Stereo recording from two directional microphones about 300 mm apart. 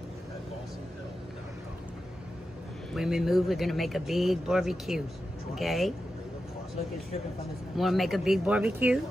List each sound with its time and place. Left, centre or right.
2.9 s speech: centre
7.7 s speech: centre